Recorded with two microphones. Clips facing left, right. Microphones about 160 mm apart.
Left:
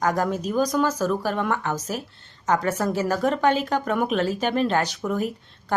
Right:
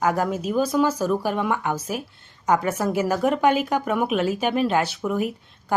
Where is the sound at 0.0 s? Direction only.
10° right (ahead or behind).